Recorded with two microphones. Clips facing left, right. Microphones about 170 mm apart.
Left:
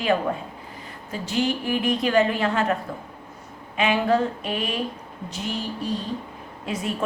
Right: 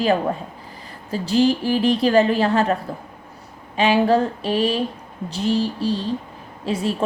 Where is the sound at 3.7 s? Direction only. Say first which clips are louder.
Right 4 dB; 35° right (ahead or behind).